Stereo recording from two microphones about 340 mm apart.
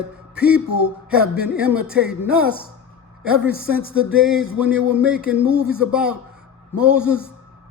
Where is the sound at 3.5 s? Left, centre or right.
Right.